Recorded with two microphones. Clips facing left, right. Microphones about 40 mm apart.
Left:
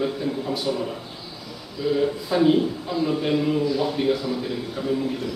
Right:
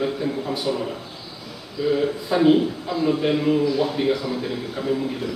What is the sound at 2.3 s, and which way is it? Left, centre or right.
A man's voice, centre.